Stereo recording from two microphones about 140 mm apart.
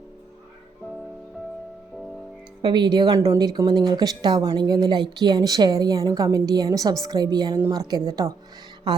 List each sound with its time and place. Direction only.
2.6 s speech: 35° right (ahead or behind)